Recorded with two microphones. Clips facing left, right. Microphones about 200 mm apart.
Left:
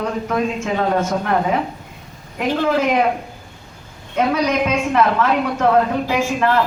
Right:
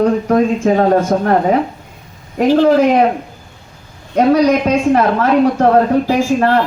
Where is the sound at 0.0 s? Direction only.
40° right (ahead or behind).